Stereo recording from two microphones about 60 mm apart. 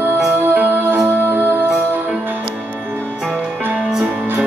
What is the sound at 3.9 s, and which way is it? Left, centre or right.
Music, centre.